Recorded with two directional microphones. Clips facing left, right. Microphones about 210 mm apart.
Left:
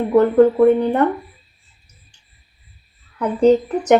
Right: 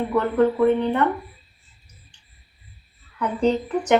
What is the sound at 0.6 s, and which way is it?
Speech, 40° left (ahead or behind).